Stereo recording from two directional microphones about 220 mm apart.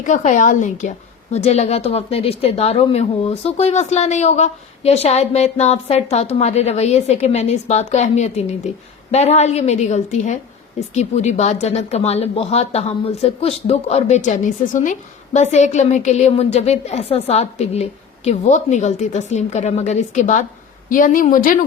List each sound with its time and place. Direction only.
0.0 s a woman's voice: 35° left (ahead or behind)